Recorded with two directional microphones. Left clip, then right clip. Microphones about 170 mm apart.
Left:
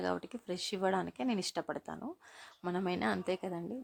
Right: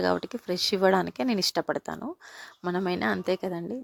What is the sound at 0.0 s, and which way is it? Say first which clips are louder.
Speech: right 10 dB; 35° right (ahead or behind).